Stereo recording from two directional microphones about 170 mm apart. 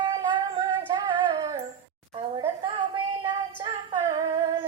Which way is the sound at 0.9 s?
25° right (ahead or behind).